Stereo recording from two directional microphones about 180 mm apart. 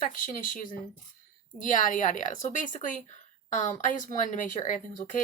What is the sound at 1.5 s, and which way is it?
Speech, 45° left (ahead or behind).